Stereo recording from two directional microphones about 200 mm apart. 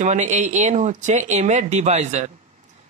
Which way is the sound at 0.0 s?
35° right (ahead or behind).